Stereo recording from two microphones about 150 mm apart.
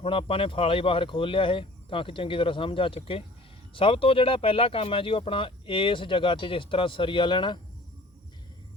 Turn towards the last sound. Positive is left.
turn(degrees=30)  # may be behind; listen again after turning